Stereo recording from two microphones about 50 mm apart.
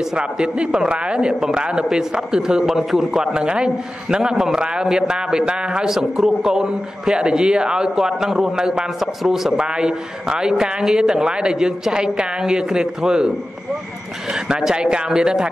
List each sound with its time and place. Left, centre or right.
0.0 s a man's voice: centre
2.6 s a man's voice: centre
3.1 s a man's voice: centre
5.9 s a man's voice: centre
9.6 s a man's voice: centre
14.3 s a man's voice: centre